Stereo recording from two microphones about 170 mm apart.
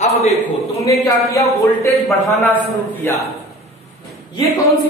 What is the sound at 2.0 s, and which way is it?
A man's voice, 10° left (ahead or behind).